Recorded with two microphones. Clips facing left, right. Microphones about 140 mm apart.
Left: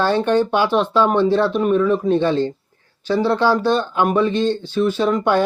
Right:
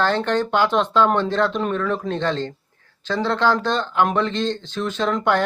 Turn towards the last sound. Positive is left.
turn(degrees=10)  # may be behind; listen again after turning